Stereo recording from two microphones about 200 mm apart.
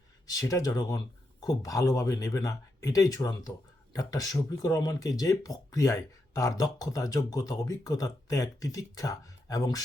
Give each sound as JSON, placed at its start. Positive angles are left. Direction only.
{"t": 0.3, "sound": "speech", "side_deg": 20}